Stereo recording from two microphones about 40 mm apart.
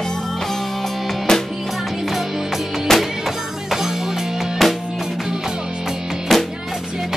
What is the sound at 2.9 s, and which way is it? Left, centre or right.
Music, centre.